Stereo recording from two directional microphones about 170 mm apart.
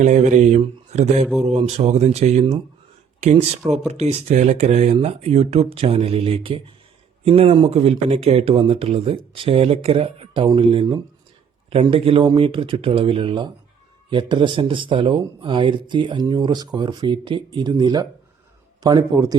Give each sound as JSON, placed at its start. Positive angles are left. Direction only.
{"t": 0.0, "sound": "speech", "side_deg": -45}